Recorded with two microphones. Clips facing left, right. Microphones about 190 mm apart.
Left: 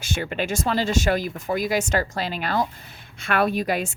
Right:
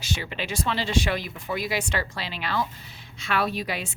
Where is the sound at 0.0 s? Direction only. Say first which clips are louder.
Left 5 dB; 50° left (ahead or behind).